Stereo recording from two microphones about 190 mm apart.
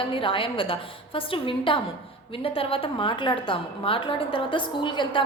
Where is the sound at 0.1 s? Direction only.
25° left (ahead or behind).